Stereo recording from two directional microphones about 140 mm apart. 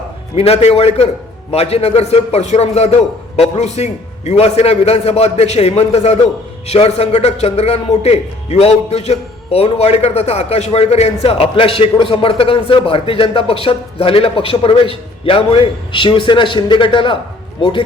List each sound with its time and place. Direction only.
0.3 s a man's voice: 45° left (ahead or behind)